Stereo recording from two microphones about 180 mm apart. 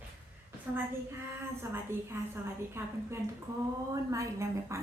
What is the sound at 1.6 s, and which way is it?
A woman's voice, 15° right (ahead or behind).